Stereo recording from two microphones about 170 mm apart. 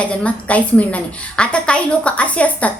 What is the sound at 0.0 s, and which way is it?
Speech, 5° left (ahead or behind).